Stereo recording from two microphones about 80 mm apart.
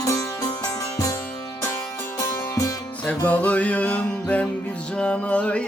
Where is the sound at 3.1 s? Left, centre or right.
Centre.